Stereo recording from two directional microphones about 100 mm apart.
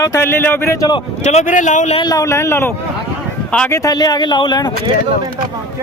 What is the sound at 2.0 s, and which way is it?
Speech, 35° left (ahead or behind).